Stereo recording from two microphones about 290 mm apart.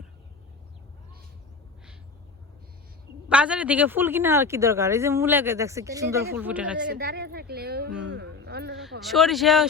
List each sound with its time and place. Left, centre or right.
3.2 s speech: centre
6.7 s speech: right
8.0 s a sound: right
9.0 s a man's voice: centre